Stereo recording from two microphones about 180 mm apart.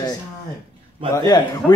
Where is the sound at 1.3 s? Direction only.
25° left (ahead or behind).